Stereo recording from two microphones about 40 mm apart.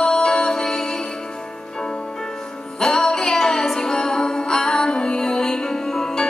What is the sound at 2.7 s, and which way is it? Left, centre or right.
Music, centre.